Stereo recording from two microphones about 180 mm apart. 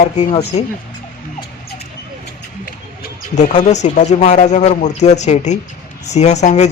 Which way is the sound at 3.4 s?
40° left (ahead or behind).